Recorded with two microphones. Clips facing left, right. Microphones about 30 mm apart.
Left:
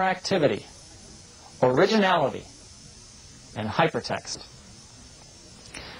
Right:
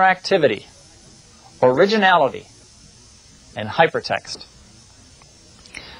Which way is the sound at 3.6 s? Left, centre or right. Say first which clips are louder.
Right 4 dB; right.